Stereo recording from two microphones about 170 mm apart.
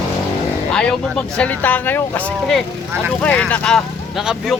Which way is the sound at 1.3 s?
10° left (ahead or behind).